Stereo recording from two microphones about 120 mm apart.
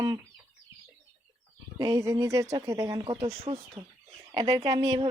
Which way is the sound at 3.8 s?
65° right (ahead or behind).